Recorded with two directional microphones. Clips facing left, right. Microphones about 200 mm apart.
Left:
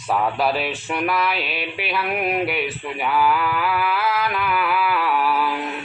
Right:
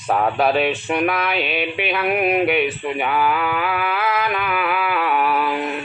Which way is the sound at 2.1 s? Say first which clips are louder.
Right 5 dB; 10° right (ahead or behind).